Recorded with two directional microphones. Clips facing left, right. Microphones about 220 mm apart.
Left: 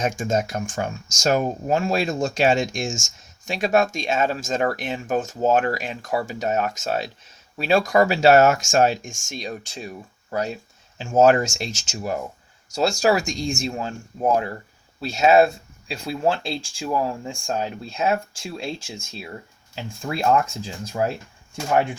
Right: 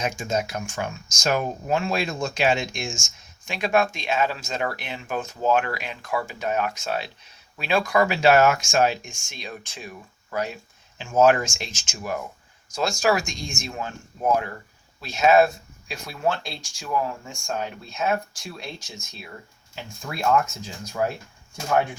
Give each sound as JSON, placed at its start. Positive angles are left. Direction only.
{"t": 0.0, "sound": "speech", "side_deg": 50}
{"t": 20.6, "sound": "speech", "side_deg": 30}